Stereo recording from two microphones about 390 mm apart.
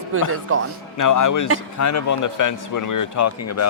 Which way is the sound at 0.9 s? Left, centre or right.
Left.